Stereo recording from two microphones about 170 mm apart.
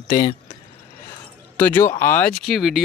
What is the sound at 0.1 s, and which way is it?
Speech, 30° left (ahead or behind).